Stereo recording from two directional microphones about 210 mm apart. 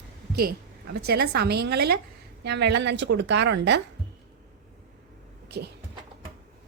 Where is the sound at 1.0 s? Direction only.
50° right (ahead or behind).